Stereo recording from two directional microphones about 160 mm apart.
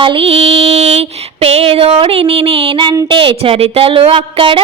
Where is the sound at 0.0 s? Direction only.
35° right (ahead or behind).